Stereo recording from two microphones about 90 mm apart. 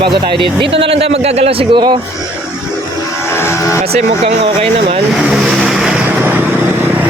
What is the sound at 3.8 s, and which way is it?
Speech, 90° right.